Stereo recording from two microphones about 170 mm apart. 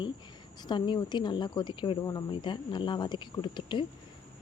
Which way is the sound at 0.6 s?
25° left (ahead or behind).